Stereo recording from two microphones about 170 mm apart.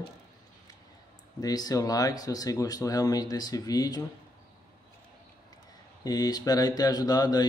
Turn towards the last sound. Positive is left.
turn(degrees=25)  # may be behind; listen again after turning